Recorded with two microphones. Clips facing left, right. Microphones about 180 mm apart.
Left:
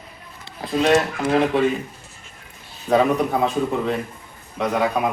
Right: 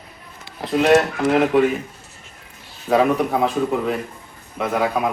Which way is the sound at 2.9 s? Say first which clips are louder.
Right 1 dB; 5° right (ahead or behind).